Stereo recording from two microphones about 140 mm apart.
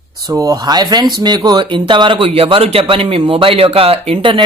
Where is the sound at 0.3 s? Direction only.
25° right (ahead or behind).